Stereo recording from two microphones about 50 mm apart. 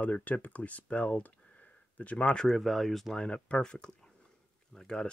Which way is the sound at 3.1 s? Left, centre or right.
Left.